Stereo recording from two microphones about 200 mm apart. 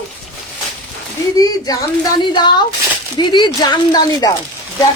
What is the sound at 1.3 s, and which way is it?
A woman's voice, 20° left (ahead or behind).